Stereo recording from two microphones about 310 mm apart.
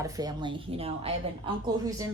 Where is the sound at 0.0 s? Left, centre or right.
Centre.